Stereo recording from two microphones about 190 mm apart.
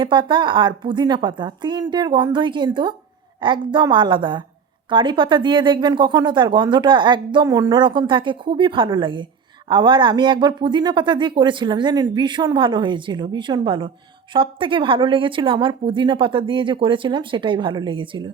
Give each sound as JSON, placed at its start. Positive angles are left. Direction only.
{"t": 0.0, "sound": "speech", "side_deg": -25}